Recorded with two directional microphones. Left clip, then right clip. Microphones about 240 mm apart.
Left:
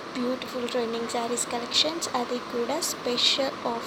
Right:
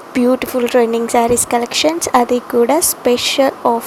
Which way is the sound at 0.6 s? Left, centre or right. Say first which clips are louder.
Right 15 dB; right.